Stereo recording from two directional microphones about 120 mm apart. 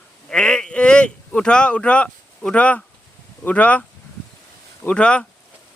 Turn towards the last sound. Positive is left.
turn(degrees=10)  # may be behind; listen again after turning